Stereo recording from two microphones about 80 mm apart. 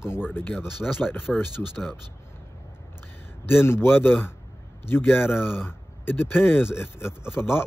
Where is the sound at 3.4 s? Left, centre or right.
Left.